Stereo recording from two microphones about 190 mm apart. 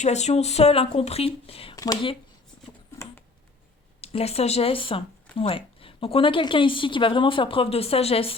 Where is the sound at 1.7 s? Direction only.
20° left (ahead or behind).